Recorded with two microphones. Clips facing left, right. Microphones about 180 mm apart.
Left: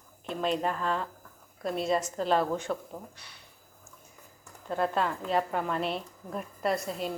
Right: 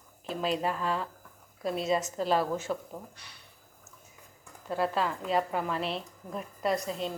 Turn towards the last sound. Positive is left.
turn(degrees=0)  # may be behind; listen again after turning